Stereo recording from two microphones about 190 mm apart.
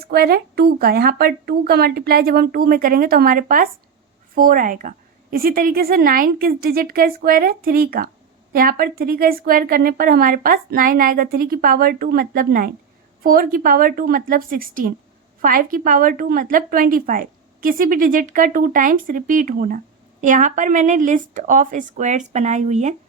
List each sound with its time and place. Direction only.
0.0 s a woman's voice: 55° right (ahead or behind); by 23.0 s 35° right (ahead or behind)